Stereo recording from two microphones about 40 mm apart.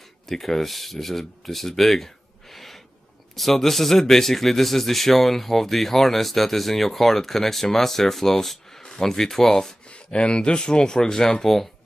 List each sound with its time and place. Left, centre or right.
0.3 s a man's voice: centre
9.8 s speech: left